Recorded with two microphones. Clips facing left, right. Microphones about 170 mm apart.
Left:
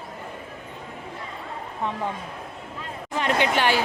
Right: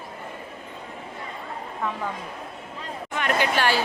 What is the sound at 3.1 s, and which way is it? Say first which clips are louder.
Speech: left 2 dB; 25° left (ahead or behind).